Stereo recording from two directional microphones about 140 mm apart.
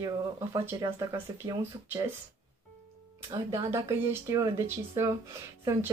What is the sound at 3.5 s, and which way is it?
Speech, 20° right (ahead or behind).